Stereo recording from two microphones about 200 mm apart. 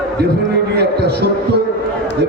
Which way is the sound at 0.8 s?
55° right (ahead or behind).